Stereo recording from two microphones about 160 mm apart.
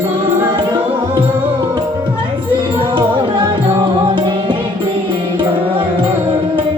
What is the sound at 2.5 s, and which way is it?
Music, 30° right (ahead or behind).